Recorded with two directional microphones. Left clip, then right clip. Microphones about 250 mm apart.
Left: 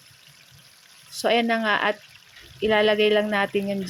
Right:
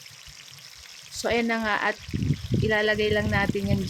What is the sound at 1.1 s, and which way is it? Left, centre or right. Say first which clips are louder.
Speech: left 4 dB; centre.